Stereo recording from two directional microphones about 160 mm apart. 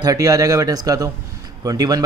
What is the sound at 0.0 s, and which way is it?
Speech, 20° right (ahead or behind).